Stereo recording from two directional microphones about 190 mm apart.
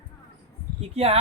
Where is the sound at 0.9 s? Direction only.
30° right (ahead or behind).